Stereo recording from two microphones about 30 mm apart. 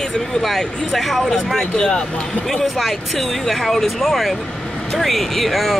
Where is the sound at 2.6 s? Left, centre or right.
Centre.